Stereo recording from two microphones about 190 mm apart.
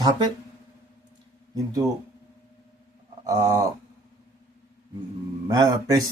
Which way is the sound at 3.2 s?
15° right (ahead or behind).